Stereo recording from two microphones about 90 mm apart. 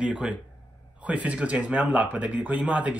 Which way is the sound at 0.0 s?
10° right (ahead or behind).